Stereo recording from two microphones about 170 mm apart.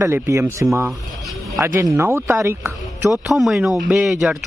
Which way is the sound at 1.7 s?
15° right (ahead or behind).